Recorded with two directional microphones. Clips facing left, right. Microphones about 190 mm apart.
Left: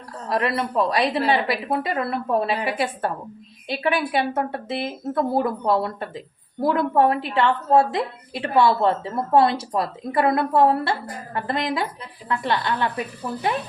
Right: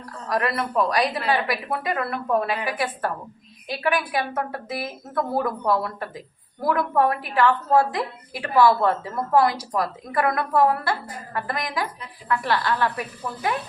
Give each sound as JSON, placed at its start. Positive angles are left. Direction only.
{"t": 0.3, "sound": "a woman's voice", "side_deg": 25}